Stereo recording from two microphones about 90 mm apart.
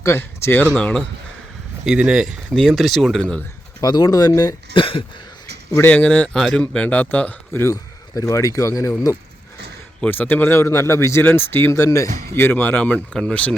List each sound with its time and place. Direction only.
0.0 s speech: 30° left (ahead or behind)
1.8 s speech: 5° right (ahead or behind); by 3.4 s 10° left (ahead or behind)
3.8 s speech: 50° left (ahead or behind)
4.7 s a sound: 85° left
5.8 s speech: 15° left (ahead or behind)
6.7 s speech: 15° left (ahead or behind)
7.6 s speech: 40° left (ahead or behind)
10.0 s speech: 20° left (ahead or behind)
11.8 s speech: 35° left (ahead or behind); by 13.5 s 15° left (ahead or behind)